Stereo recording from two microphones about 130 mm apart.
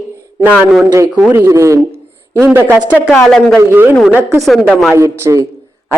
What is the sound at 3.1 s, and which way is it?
Speech, 5° left (ahead or behind).